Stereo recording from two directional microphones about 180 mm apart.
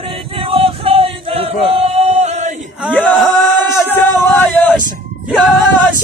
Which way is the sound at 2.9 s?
10° left (ahead or behind).